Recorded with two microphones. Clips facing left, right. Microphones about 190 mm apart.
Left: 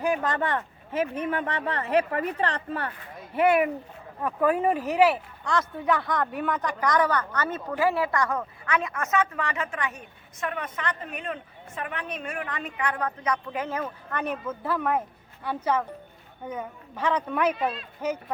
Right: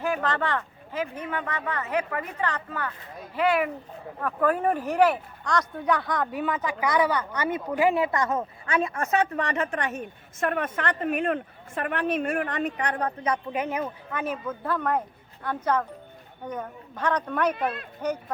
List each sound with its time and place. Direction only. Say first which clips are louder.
0.0 s speech: left 1 dB; 15° left (ahead or behind)
1.3 s speech: left 2 dB; 30° left (ahead or behind)
4.2 s a woman's voice: left 1 dB; 10° left (ahead or behind); by 13.9 s 15° right (ahead or behind)
14.1 s speech: even; centre (ahead or behind)